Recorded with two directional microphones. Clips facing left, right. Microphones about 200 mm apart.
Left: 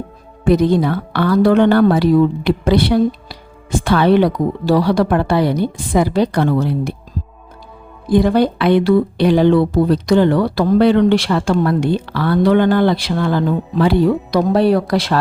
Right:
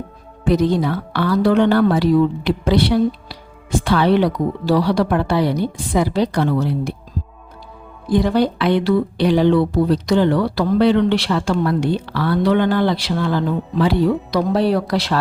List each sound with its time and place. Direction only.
0.4 s speech: 55° left (ahead or behind)
8.1 s speech: 55° left (ahead or behind)